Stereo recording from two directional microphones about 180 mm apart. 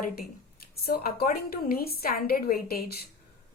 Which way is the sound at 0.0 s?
55° left (ahead or behind).